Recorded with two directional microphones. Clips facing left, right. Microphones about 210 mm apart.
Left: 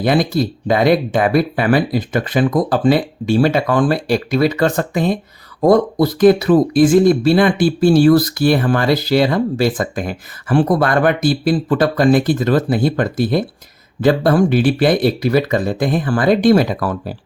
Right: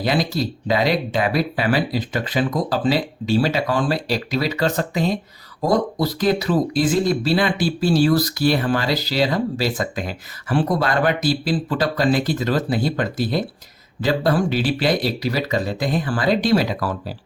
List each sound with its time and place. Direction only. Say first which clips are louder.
0.0 s speech: left 6 dB; 50° left (ahead or behind)